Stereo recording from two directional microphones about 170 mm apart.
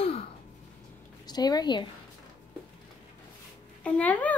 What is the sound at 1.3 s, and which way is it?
Speech, 25° left (ahead or behind).